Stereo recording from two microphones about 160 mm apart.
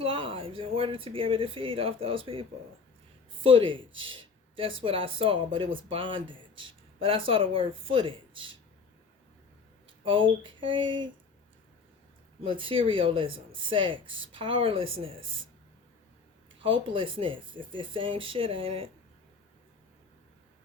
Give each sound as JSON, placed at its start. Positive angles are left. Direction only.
{"t": 0.0, "sound": "speech", "side_deg": -35}
{"t": 10.0, "sound": "speech", "side_deg": -30}
{"t": 12.4, "sound": "speech", "side_deg": -35}
{"t": 16.6, "sound": "speech", "side_deg": -35}